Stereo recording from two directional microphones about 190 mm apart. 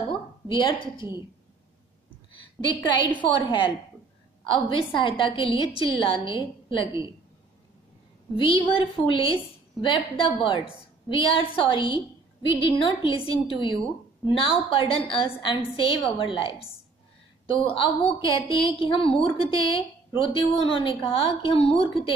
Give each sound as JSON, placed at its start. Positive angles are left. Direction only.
{"t": 0.9, "sound": "a woman's voice", "side_deg": -15}
{"t": 2.7, "sound": "a woman's voice", "side_deg": 25}
{"t": 8.4, "sound": "a woman's voice", "side_deg": 25}